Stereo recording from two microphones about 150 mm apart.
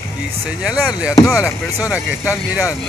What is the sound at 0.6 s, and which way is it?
Speech, 5° right (ahead or behind).